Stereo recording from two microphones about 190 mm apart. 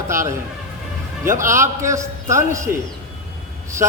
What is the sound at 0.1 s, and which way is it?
A man's voice, 15° right (ahead or behind).